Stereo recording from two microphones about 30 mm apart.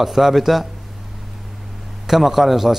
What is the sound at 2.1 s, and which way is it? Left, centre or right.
Speech, centre.